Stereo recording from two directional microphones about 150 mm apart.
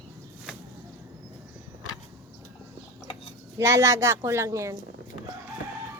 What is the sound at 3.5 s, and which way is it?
Speech, 20° right (ahead or behind).